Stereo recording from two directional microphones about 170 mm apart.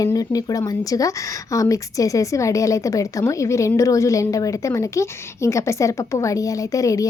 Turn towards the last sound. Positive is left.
turn(degrees=20)  # may be behind; listen again after turning